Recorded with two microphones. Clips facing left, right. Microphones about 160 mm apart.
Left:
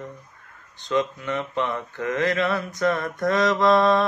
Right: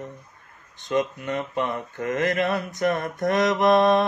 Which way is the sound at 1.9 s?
45° right (ahead or behind).